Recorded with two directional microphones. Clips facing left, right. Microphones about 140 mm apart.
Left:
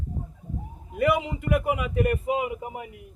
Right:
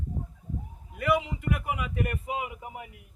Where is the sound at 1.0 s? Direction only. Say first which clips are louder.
Left 3 dB; 15° left (ahead or behind).